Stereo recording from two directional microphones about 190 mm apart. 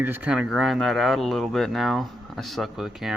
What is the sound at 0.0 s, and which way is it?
Speech, 10° right (ahead or behind).